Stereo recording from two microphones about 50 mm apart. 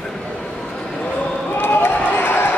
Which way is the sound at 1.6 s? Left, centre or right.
Left.